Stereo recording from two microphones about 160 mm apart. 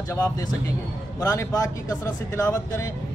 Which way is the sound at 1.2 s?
20° left (ahead or behind).